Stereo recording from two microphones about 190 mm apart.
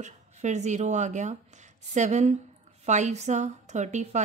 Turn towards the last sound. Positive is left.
turn(degrees=-40)  # may be behind; listen again after turning